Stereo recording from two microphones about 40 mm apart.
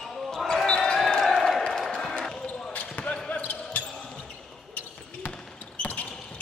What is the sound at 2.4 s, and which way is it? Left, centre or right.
Basketball bounce, left.